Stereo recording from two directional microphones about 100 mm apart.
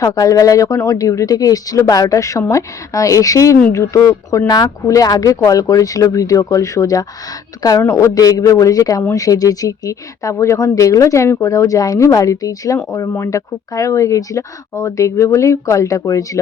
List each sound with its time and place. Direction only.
0.0 s speech: 35° left (ahead or behind)
4.4 s speech: 45° left (ahead or behind)